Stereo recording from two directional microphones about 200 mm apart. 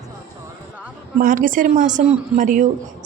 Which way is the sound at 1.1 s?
40° right (ahead or behind).